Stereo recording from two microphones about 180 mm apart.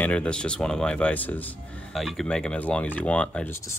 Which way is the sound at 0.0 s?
5° left (ahead or behind).